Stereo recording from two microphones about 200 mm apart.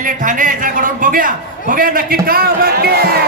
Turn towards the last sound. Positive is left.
turn(degrees=-50)  # may be behind; listen again after turning